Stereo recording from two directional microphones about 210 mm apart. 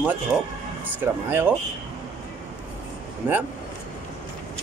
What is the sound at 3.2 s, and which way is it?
Speech, 10° right (ahead or behind).